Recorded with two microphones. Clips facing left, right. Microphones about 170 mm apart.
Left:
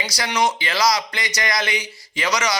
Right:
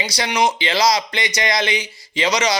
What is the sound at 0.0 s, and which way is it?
Speech, 25° right (ahead or behind).